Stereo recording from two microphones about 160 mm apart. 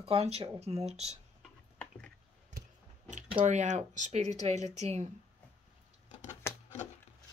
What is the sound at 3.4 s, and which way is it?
Speech, 50° right (ahead or behind).